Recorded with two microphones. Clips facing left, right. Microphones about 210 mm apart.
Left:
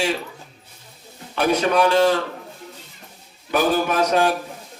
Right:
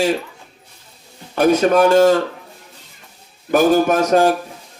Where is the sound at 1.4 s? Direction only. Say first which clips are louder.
Right 5 dB; 45° right (ahead or behind).